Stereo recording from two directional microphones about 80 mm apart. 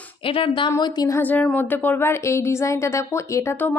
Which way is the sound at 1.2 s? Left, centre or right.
Left.